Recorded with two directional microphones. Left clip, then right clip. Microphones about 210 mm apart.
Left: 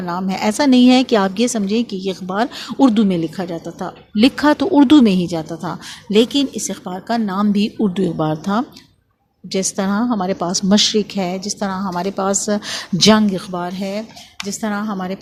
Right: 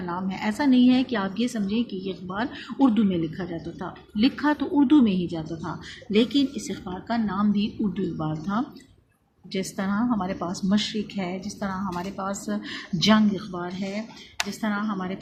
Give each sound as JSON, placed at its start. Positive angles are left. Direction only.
{"t": 0.0, "sound": "a woman's voice", "side_deg": 45}